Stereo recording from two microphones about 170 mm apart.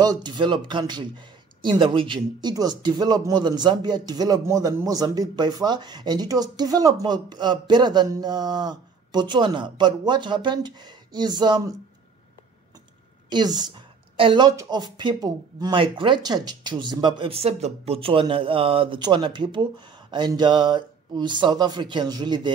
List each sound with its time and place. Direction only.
0.0 s a man's voice: 25° right (ahead or behind)
13.3 s a man's voice: 25° right (ahead or behind)